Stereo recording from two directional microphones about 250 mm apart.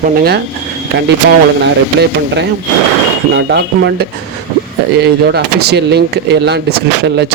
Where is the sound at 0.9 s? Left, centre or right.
Right.